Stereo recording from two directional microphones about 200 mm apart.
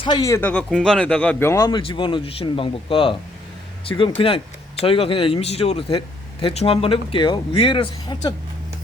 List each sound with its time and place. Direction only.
0.0 s a man's voice: 20° left (ahead or behind)